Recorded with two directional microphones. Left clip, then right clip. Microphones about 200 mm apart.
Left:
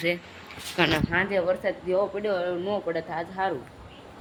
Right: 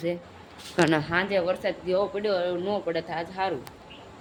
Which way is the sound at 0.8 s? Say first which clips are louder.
Right 1 dB; 40° right (ahead or behind).